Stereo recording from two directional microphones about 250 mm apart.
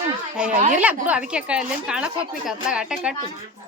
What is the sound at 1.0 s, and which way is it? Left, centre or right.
A woman's voice, centre.